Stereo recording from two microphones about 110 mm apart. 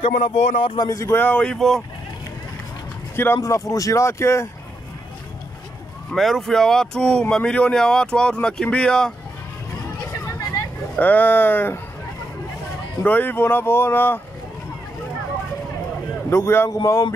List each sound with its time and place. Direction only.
0.0 s speech: 65° left (ahead or behind)
0.7 s speech: 30° left (ahead or behind); by 1.8 s 5° left (ahead or behind)
3.3 s speech: 30° left (ahead or behind)
6.1 s speech: centre (ahead or behind)
11.0 s speech: 15° left (ahead or behind)
13.0 s speech: 15° left (ahead or behind)
16.3 s speech: 25° left (ahead or behind)